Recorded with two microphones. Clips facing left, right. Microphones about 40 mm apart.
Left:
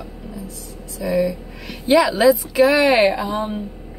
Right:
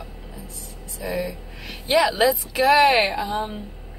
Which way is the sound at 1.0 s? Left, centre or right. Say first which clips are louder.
Left 8 dB; centre.